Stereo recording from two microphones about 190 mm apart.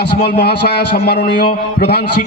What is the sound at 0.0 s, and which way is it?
A man's voice, 60° left (ahead or behind).